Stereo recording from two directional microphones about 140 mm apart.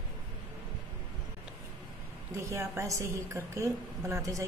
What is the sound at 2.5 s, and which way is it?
A woman's voice, 20° right (ahead or behind).